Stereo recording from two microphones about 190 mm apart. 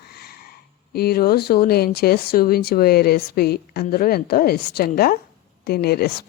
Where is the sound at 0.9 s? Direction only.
55° left (ahead or behind).